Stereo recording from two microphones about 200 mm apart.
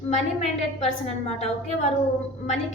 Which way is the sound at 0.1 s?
35° left (ahead or behind).